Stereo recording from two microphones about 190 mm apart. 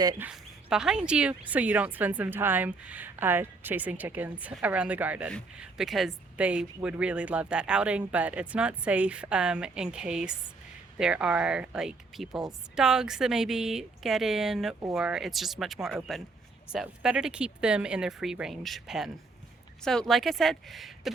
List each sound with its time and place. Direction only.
0.0 s speech: 20° right (ahead or behind)
0.3 s speech: 5° right (ahead or behind)